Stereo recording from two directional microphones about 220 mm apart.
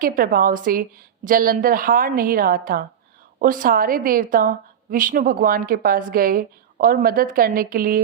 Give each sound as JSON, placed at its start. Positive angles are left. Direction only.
{"t": 0.0, "sound": "a woman's voice", "side_deg": -40}